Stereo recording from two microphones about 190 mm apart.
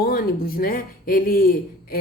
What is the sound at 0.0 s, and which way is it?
A man's voice, 50° left (ahead or behind).